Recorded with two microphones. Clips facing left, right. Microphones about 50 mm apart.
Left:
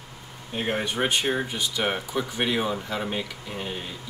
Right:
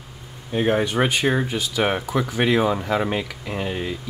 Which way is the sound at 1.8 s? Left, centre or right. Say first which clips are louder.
Right 6 dB; right.